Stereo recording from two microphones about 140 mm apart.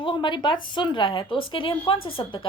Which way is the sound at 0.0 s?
35° left (ahead or behind).